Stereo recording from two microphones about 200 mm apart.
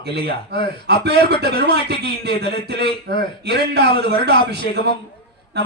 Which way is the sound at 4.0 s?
25° left (ahead or behind).